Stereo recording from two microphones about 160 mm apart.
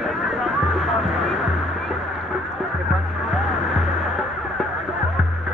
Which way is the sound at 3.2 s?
Centre (ahead or behind).